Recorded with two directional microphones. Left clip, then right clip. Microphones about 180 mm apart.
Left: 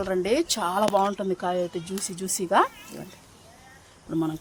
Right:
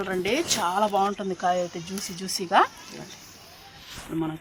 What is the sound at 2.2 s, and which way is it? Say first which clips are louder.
Speech: right 1 dB; 85° left.